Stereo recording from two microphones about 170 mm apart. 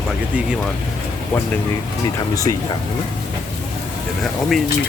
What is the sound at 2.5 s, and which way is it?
Speech, 25° left (ahead or behind).